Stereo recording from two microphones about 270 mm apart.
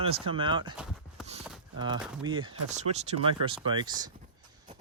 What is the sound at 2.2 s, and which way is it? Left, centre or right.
Speech, centre.